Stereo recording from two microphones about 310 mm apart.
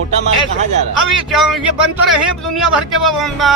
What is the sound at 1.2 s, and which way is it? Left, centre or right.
Speech, centre.